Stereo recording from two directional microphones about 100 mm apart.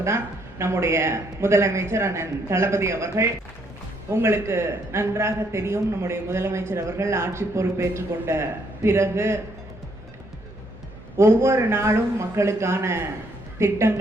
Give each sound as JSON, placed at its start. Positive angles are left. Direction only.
{"t": 0.6, "sound": "a man's voice", "side_deg": -25}
{"t": 11.2, "sound": "a man's voice", "side_deg": -30}